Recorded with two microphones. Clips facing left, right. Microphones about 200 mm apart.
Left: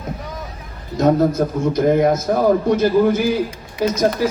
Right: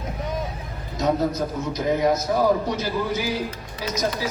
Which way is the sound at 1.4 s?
55° left (ahead or behind).